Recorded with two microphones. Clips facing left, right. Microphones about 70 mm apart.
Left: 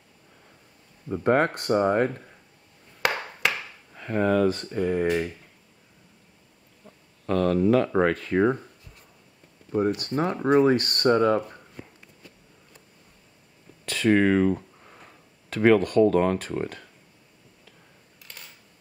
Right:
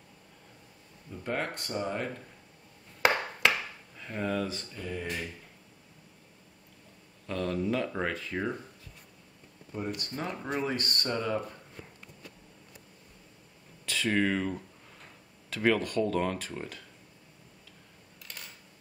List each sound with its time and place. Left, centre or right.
1.0 s speech: left
3.9 s speech: left
7.2 s speech: left
9.7 s speech: left
13.8 s speech: left
15.5 s speech: left